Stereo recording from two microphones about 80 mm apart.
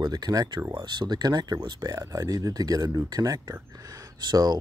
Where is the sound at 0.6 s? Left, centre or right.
Right.